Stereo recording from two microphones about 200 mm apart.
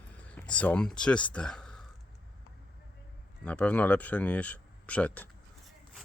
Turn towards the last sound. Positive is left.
turn(degrees=10)  # may be behind; listen again after turning